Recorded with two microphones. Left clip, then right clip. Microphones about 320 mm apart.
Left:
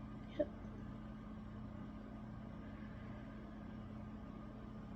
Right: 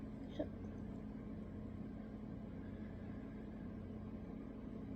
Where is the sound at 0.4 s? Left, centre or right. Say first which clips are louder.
Left 6 dB; centre.